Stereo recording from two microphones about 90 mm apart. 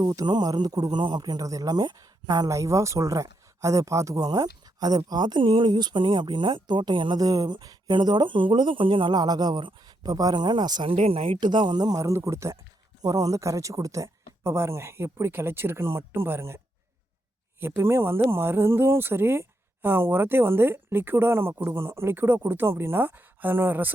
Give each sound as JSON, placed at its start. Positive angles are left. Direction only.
{"t": 0.0, "sound": "speech", "side_deg": -45}
{"t": 7.2, "sound": "speech", "side_deg": -45}
{"t": 9.1, "sound": "speech", "side_deg": -50}
{"t": 10.8, "sound": "speech", "side_deg": -90}
{"t": 17.6, "sound": "speech", "side_deg": -25}